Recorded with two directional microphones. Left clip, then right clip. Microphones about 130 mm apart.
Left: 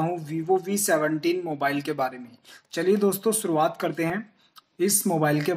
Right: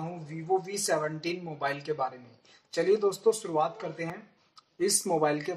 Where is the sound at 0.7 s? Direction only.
35° left (ahead or behind).